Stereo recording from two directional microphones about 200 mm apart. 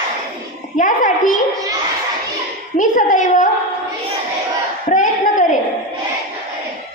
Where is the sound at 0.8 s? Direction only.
40° left (ahead or behind).